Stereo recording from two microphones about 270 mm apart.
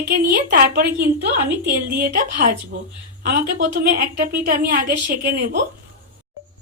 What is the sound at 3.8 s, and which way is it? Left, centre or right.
Speech, right.